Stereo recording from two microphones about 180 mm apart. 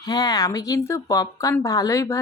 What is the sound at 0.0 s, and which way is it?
Speech, 20° left (ahead or behind).